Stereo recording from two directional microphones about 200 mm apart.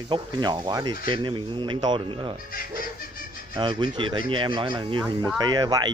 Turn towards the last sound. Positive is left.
turn(degrees=-20)  # may be behind; listen again after turning